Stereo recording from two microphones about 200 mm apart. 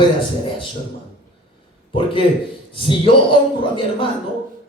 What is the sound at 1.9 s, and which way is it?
A man's voice, 25° left (ahead or behind).